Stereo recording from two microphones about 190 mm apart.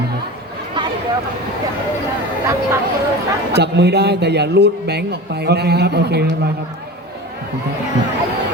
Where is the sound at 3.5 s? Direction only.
60° right (ahead or behind).